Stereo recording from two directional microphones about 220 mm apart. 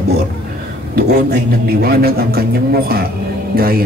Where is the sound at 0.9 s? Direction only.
45° right (ahead or behind).